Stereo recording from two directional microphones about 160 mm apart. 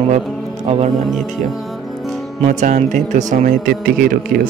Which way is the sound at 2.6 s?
50° right (ahead or behind).